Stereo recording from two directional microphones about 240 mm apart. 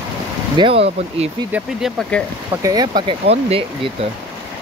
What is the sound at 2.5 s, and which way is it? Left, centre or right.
Speech, centre.